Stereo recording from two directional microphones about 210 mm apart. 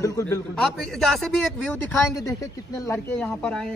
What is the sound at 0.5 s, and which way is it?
Speech, centre (ahead or behind).